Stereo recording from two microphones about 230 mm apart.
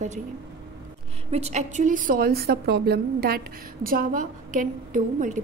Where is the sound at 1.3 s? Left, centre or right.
Right.